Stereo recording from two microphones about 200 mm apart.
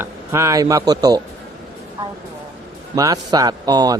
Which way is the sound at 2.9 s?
15° right (ahead or behind).